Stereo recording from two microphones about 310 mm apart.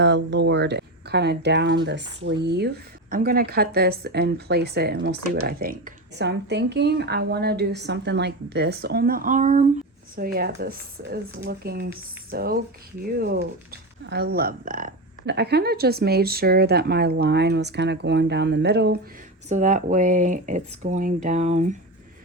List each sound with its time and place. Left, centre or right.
0.0 s speech: right